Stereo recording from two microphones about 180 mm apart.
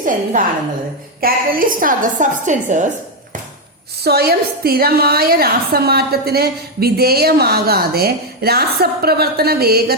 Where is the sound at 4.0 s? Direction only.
60° right (ahead or behind).